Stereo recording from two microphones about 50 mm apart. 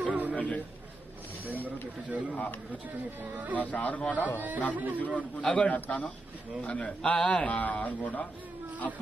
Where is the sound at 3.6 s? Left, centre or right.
Left.